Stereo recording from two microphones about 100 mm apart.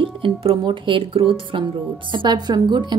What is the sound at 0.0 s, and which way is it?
Speech, 65° right (ahead or behind).